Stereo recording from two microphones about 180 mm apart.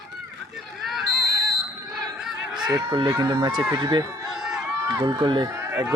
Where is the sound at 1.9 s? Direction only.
5° right (ahead or behind).